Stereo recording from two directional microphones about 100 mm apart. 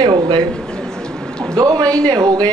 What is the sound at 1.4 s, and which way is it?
A man's voice, 40° right (ahead or behind).